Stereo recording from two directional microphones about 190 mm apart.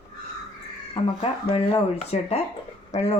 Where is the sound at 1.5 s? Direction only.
30° left (ahead or behind).